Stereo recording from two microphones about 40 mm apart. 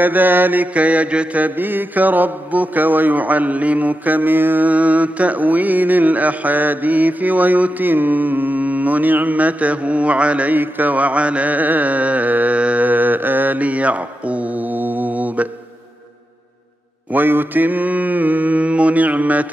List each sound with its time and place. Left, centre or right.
0.0 s mantra: right
0.7 s mantra: right
1.4 s mantra: right
4.6 s mantra: right
10.5 s mantra: right
12.5 s mantra: right
12.8 s mantra: right
17.1 s mantra: right